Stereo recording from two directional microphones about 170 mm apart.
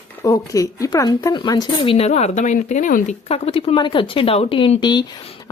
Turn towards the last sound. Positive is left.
turn(degrees=25)  # may be behind; listen again after turning